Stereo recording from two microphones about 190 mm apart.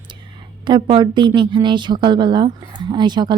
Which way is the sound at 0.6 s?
25° right (ahead or behind).